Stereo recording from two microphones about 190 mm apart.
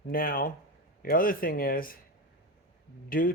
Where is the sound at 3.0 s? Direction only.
50° left (ahead or behind).